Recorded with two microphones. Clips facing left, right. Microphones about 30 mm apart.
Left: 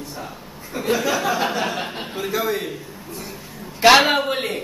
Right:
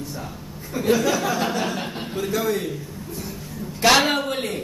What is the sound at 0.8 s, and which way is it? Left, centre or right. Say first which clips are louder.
A man's voice: even; centre.